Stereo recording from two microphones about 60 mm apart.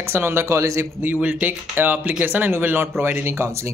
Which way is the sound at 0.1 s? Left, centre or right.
Right.